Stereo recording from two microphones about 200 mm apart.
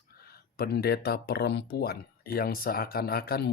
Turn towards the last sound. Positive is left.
turn(degrees=50)  # may be behind; listen again after turning